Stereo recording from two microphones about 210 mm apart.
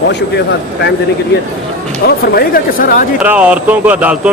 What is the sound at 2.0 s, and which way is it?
Speech, 45° left (ahead or behind).